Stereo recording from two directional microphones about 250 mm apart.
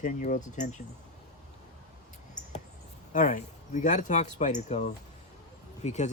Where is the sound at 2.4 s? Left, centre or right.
Left.